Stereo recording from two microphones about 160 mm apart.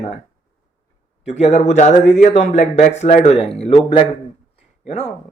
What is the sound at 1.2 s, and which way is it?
Speech, 40° left (ahead or behind).